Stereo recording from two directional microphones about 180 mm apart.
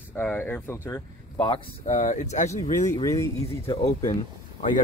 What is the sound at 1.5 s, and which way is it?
Speech, 40° left (ahead or behind).